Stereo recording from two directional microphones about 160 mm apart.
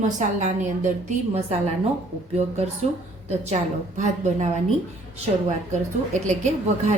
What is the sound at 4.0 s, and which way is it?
Speech, 45° right (ahead or behind).